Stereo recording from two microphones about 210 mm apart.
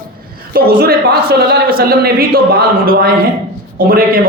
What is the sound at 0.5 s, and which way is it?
A man's voice, 45° right (ahead or behind).